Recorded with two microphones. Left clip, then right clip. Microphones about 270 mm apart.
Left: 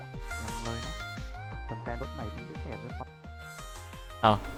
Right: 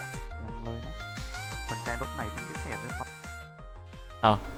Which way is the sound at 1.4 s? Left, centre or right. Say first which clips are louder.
Right 4 dB; right.